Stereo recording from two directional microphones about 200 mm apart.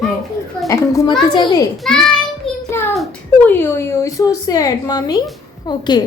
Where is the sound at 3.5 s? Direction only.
10° left (ahead or behind).